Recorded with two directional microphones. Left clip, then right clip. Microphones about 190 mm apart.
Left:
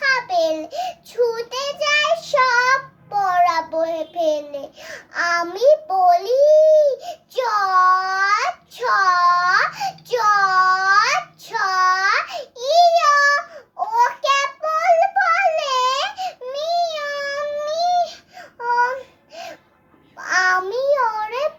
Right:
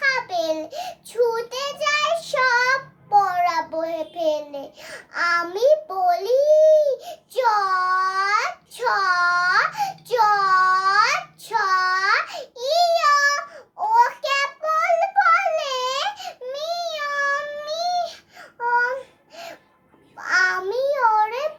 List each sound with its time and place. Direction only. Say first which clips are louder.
0.0 s child singing: left 4 dB; 10° right (ahead or behind)
5.5 s baby cry: left 3 dB; 10° right (ahead or behind)
13.3 s child singing: left 5 dB; 10° right (ahead or behind)
17.7 s a sound: left 5 dB; 10° right (ahead or behind)
18.6 s babbling: left 2 dB; 10° right (ahead or behind)
20.2 s child singing: left 2 dB; 10° right (ahead or behind)